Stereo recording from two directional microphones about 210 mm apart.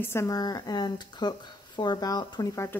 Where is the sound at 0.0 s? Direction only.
10° left (ahead or behind).